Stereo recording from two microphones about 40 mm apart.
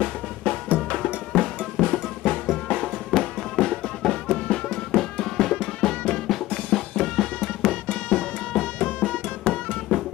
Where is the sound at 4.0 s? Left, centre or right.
Centre.